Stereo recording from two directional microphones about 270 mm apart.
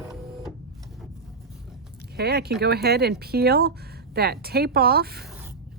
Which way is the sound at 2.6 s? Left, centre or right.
Right.